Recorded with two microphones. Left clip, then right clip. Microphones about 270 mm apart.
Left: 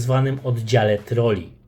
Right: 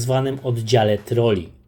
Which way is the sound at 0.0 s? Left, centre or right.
Centre.